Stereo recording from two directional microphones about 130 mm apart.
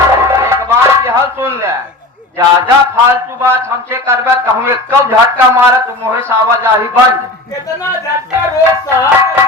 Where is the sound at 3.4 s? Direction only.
20° right (ahead or behind).